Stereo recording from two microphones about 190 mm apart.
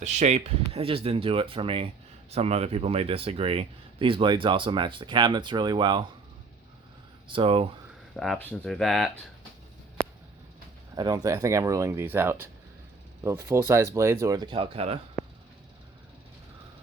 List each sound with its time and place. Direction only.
0.0 s speech: 40° right (ahead or behind)
7.3 s speech: 30° right (ahead or behind)
8.1 s speech: centre (ahead or behind)
10.9 s speech: 20° right (ahead or behind)
13.5 s speech: 15° right (ahead or behind); by 14.9 s 30° right (ahead or behind)